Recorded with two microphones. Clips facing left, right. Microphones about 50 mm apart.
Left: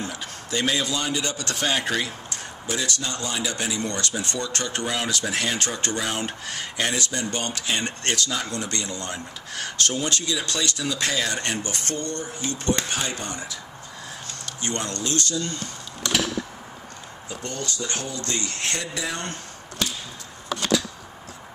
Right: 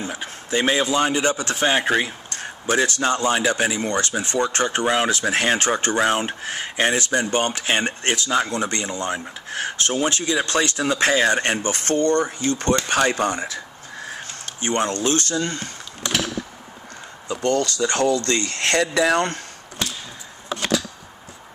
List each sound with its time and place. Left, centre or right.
0.1 s speech: right
2.7 s speech: right
7.8 s speech: right
11.9 s speech: right
12.9 s speech: right
13.3 s speech: right
14.8 s speech: right
17.3 s speech: right